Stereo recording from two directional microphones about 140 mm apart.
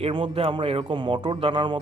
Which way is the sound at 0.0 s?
40° right (ahead or behind).